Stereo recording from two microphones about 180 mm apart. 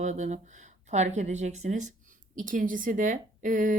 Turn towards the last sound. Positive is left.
turn(degrees=-45)  # may be behind; listen again after turning